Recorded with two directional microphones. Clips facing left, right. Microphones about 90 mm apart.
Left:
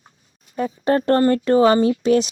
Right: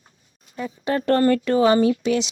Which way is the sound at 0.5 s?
45° left (ahead or behind).